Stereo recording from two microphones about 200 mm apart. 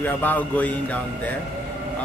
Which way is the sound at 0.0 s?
10° left (ahead or behind).